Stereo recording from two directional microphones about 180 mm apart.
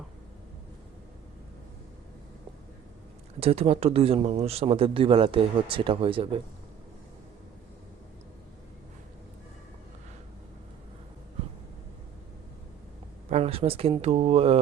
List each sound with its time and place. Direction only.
3.4 s speech: 35° right (ahead or behind)
13.3 s speech: 35° right (ahead or behind)